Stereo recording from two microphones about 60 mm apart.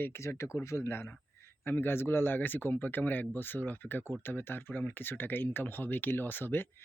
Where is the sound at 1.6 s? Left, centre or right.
Left.